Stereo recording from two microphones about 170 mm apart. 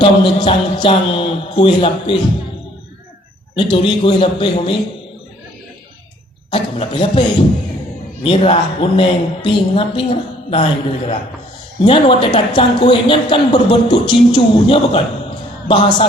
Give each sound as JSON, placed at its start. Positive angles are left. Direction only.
{"t": 0.0, "sound": "speech", "side_deg": 30}
{"t": 3.5, "sound": "a man's voice", "side_deg": 30}
{"t": 6.5, "sound": "speech", "side_deg": 30}
{"t": 8.2, "sound": "a man's voice", "side_deg": 30}